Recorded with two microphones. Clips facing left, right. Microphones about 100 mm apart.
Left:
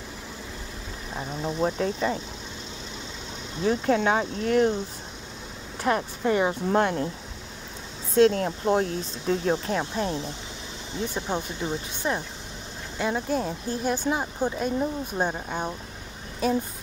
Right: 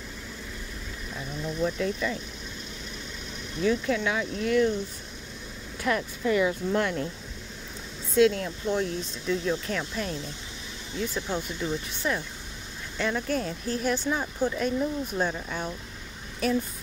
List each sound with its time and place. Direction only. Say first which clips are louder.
1.1 s speech: left 4 dB; 40° left (ahead or behind)
3.6 s speech: left 3 dB; 40° left (ahead or behind)
5.8 s speech: left 3 dB; 40° left (ahead or behind)
8.2 s speech: left 2 dB; 45° left (ahead or behind)
9.7 s speech: left 4 dB; 30° left (ahead or behind)